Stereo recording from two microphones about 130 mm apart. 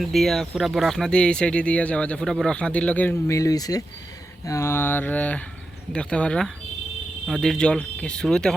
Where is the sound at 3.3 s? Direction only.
25° left (ahead or behind).